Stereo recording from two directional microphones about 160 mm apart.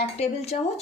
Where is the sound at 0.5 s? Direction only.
50° left (ahead or behind).